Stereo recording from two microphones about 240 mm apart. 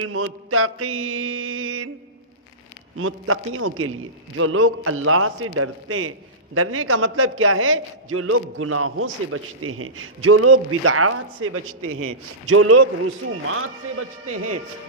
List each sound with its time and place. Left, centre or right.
0.0 s a man's voice: right
3.0 s a man's voice: right